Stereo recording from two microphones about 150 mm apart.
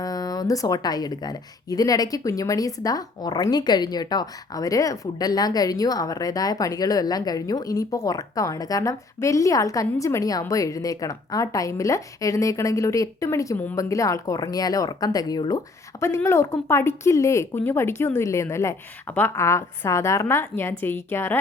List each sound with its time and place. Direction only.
0.0 s speech: 25° left (ahead or behind)